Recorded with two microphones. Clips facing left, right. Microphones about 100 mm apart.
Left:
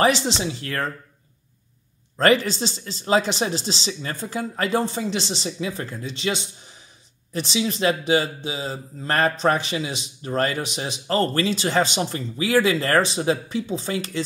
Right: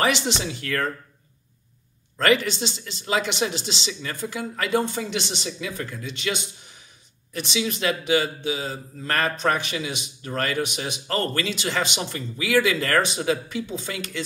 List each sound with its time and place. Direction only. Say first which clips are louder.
0.0 s speech: left 3 dB; 30° left (ahead or behind)
2.1 s speech: left 2 dB; 35° left (ahead or behind)